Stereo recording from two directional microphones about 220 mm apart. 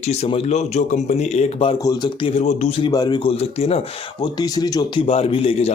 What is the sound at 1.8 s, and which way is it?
A man's voice, 20° left (ahead or behind).